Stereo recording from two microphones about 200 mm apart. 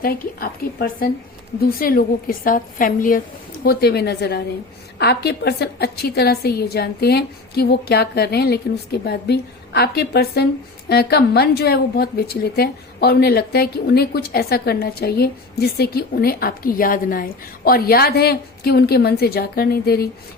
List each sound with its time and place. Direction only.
0.0 s a woman's voice: 45° left (ahead or behind)